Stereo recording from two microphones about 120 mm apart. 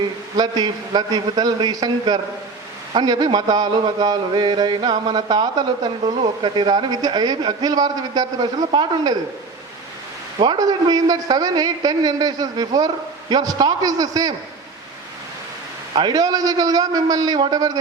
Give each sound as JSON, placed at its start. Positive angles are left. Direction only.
{"t": 0.3, "sound": "mantra", "side_deg": -35}
{"t": 10.3, "sound": "mantra", "side_deg": -40}
{"t": 16.0, "sound": "mantra", "side_deg": -35}